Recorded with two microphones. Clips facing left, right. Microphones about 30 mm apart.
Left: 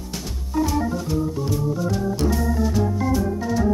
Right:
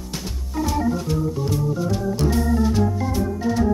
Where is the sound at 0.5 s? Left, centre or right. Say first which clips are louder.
Even; centre.